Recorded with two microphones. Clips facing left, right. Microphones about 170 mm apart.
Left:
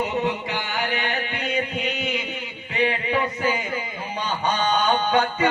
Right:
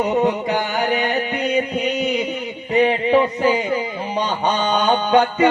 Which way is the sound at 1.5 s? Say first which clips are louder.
Right 5 dB; 40° right (ahead or behind).